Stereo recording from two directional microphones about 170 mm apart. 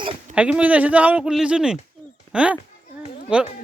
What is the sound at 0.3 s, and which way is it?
Speech, 5° right (ahead or behind).